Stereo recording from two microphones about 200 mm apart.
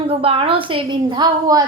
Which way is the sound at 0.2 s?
25° right (ahead or behind).